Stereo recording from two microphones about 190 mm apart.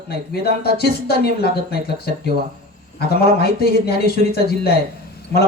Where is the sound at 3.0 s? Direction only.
55° left (ahead or behind).